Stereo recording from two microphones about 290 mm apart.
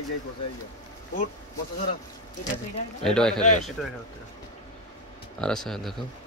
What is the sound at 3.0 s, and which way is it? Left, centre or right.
Speech, centre.